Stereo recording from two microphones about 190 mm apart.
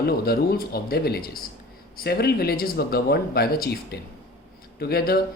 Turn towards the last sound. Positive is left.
turn(degrees=55)  # may be behind; listen again after turning